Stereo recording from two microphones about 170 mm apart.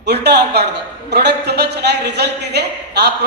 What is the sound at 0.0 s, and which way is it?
A woman's voice, 80° right.